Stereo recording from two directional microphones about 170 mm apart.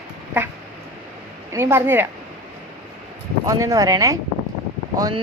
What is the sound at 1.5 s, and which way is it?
Speech, 15° right (ahead or behind).